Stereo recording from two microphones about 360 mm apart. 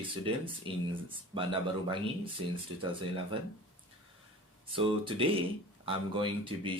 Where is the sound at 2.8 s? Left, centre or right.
Centre.